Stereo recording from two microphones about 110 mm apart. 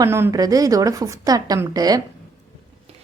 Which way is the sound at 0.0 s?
25° right (ahead or behind).